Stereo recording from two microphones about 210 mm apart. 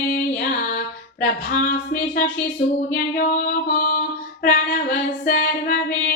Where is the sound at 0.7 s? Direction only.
50° left (ahead or behind).